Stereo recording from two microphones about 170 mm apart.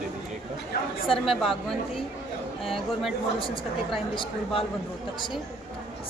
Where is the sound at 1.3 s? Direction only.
Centre (ahead or behind).